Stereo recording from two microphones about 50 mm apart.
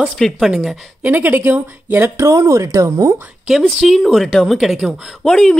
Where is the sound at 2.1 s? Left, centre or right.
Right.